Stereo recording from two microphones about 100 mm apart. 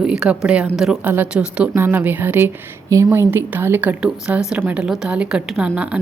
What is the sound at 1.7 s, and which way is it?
A woman's voice, 20° right (ahead or behind).